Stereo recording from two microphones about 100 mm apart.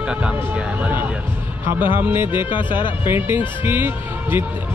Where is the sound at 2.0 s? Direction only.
20° right (ahead or behind).